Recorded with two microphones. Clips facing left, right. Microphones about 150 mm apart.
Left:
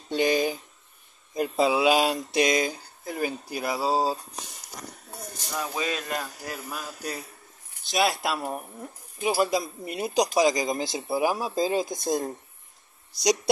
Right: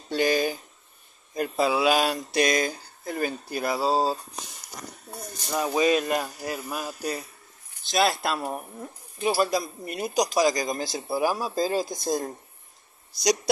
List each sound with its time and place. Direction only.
0.1 s speech: 20° left (ahead or behind)
1.3 s a sound: 15° left (ahead or behind)
5.5 s speech: 25° right (ahead or behind)
5.8 s speech: 15° right (ahead or behind)
7.9 s a sound: 10° left (ahead or behind)
9.4 s speech: 20° left (ahead or behind)